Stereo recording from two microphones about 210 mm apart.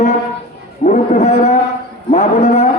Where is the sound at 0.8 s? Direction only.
35° left (ahead or behind).